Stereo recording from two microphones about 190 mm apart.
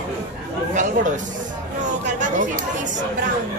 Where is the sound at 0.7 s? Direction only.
40° right (ahead or behind).